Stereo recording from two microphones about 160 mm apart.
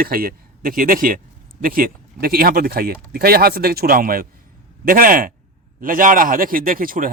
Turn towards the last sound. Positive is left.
turn(degrees=-60)  # may be behind; listen again after turning